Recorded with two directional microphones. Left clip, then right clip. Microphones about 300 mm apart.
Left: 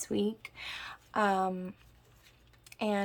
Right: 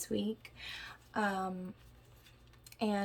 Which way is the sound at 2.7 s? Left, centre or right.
Centre.